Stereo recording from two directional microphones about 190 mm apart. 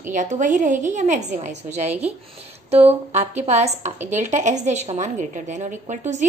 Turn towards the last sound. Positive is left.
turn(degrees=-40)  # may be behind; listen again after turning